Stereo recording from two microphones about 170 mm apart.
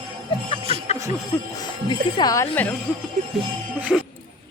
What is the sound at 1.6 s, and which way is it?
Speech, 25° left (ahead or behind).